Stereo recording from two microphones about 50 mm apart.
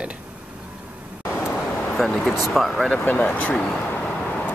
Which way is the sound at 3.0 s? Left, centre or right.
Left.